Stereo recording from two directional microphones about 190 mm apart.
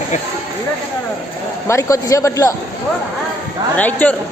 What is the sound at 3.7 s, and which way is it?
Speech, 10° left (ahead or behind).